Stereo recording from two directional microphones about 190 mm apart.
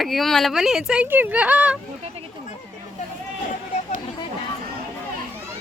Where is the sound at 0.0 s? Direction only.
Centre (ahead or behind).